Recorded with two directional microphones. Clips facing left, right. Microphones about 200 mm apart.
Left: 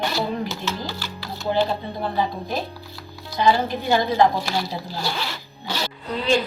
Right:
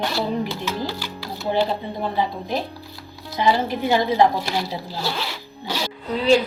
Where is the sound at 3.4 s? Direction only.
20° right (ahead or behind).